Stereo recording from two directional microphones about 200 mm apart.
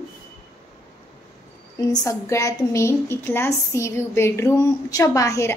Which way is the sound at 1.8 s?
15° left (ahead or behind).